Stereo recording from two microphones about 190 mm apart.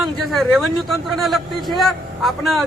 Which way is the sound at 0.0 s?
Centre (ahead or behind).